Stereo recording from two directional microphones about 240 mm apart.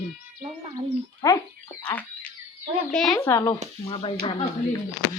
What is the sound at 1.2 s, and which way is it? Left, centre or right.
Speech, centre.